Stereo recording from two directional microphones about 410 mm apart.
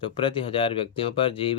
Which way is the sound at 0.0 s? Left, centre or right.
Centre.